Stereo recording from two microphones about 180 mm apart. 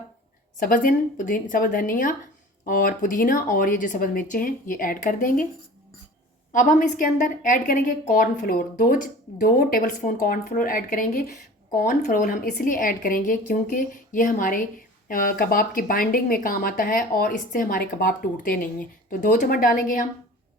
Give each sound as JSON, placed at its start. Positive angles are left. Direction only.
{"t": 0.6, "sound": "a woman's voice", "side_deg": 50}
{"t": 6.5, "sound": "a woman's voice", "side_deg": 45}